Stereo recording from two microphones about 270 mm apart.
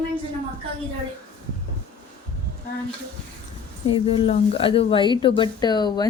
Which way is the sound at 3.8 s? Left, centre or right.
Centre.